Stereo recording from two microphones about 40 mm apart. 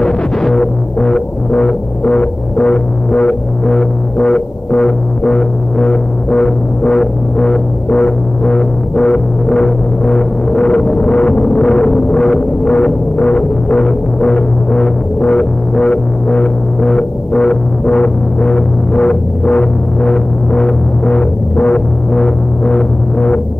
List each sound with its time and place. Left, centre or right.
0.0 s music: centre
3.6 s music: centre
12.2 s music: centre
13.2 s music: centre
23.1 s music: left